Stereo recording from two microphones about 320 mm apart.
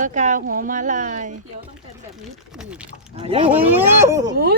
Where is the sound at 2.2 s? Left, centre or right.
Centre.